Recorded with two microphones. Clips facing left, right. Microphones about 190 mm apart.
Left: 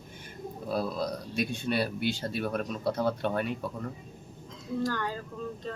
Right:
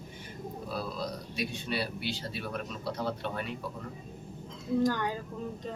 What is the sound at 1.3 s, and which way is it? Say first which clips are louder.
Speech: left 5 dB; 50° left (ahead or behind).